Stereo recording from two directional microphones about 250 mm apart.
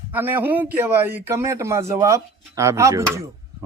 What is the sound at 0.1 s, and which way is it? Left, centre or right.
Speech, centre.